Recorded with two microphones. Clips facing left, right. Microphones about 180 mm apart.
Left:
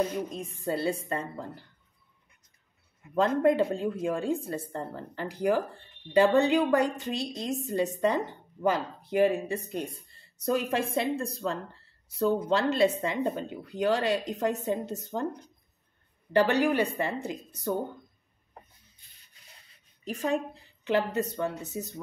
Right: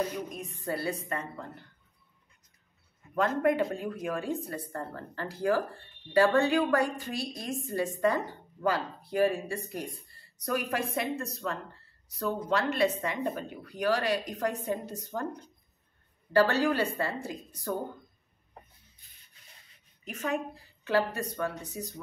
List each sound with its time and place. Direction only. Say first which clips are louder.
0.1 s speech: left 4 dB; 25° left (ahead or behind)
3.2 s speech: left 3 dB; 30° left (ahead or behind)
16.3 s speech: left 1 dB; 15° left (ahead or behind)
20.1 s a woman's voice: left 4 dB; 35° left (ahead or behind)
20.5 s a woman's voice: left 1 dB; 20° left (ahead or behind)